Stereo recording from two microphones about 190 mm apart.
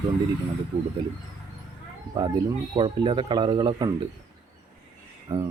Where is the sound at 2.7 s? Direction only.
25° right (ahead or behind).